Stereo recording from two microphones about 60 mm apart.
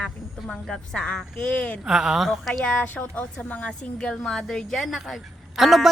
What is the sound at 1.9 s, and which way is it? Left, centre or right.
Speech, centre.